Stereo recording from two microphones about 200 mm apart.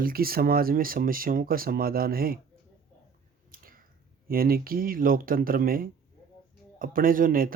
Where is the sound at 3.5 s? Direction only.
45° right (ahead or behind).